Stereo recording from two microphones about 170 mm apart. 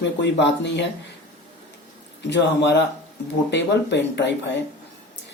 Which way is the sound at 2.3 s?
90° left.